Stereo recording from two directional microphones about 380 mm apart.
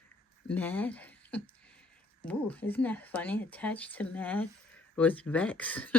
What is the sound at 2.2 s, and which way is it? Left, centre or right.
Speech, centre.